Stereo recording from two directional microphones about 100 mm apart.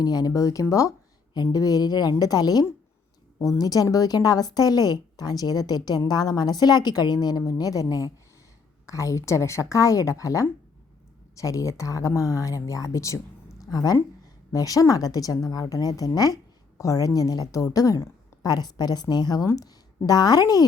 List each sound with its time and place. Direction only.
0.0 s a woman's voice: 40° left (ahead or behind)